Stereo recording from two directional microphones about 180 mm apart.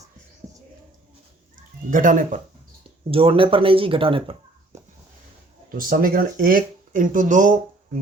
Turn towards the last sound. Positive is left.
turn(degrees=-45)  # may be behind; listen again after turning